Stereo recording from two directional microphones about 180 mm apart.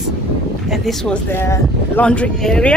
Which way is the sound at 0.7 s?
Centre (ahead or behind).